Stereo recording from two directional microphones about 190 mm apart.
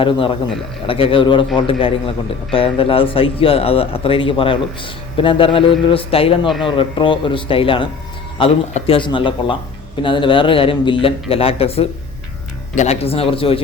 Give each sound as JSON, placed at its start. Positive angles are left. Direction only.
{"t": 0.0, "sound": "a man's voice", "side_deg": 25}